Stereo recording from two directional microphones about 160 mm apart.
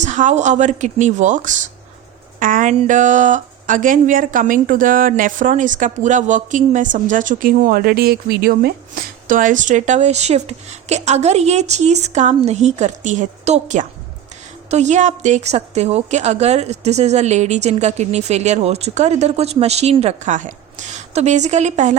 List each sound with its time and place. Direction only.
0.0 s a woman's voice: 50° right (ahead or behind); by 8.7 s 75° right (ahead or behind)
9.2 s a woman's voice: 55° right (ahead or behind)